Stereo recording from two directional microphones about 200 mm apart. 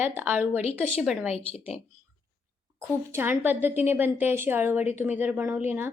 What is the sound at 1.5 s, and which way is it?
Speech, 30° left (ahead or behind).